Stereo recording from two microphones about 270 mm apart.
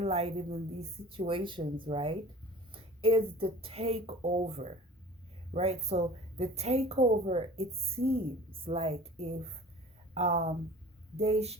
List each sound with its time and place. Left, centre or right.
0.0 s a woman's voice: right